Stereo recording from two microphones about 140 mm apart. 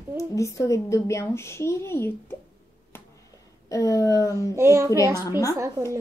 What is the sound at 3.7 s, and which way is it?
Speech, 25° left (ahead or behind).